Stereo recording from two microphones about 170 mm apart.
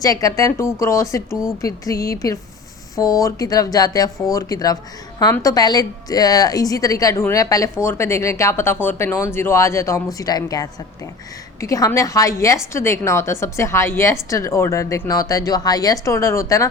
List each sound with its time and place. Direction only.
0.0 s a woman's voice: 20° left (ahead or behind)